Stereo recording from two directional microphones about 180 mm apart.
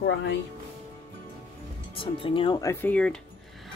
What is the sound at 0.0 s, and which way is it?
Speech, 90° left.